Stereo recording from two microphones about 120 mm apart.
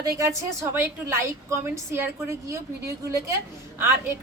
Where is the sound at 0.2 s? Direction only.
20° right (ahead or behind).